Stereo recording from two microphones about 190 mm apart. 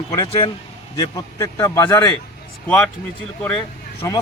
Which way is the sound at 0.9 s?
20° left (ahead or behind).